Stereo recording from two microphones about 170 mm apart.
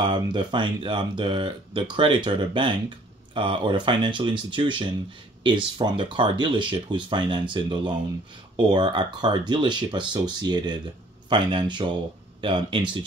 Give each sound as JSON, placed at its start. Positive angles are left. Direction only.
{"t": 0.0, "sound": "speech", "side_deg": -25}